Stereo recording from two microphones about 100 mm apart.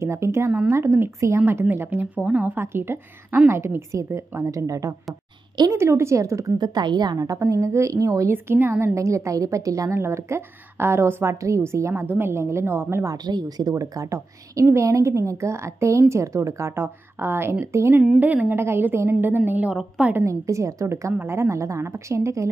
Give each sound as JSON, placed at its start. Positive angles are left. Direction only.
{"t": 0.0, "sound": "a woman's voice", "side_deg": -25}
{"t": 6.6, "sound": "a woman's voice", "side_deg": -45}
{"t": 13.1, "sound": "a woman's voice", "side_deg": -45}
{"t": 20.2, "sound": "a woman's voice", "side_deg": -30}